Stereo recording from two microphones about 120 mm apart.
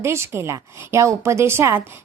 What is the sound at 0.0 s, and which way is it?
A woman's voice, 20° right (ahead or behind).